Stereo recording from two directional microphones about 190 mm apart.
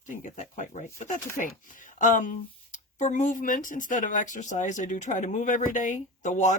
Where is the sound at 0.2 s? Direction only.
40° left (ahead or behind).